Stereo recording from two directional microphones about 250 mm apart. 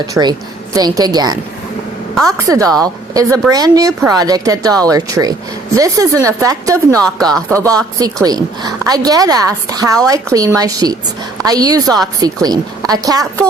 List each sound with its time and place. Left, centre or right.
0.1 s a woman's voice: centre
2.5 s a woman's voice: centre